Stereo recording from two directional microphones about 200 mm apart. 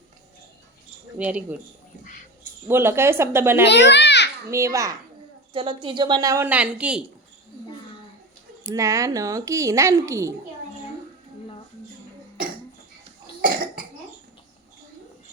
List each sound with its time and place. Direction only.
1.2 s speech: 5° right (ahead or behind)
2.6 s speech: 10° right (ahead or behind)
3.7 s a child's voice: 60° left (ahead or behind)
4.5 s speech: 15° right (ahead or behind)
8.6 s speech: 15° right (ahead or behind)
13.4 s cough: 50° right (ahead or behind)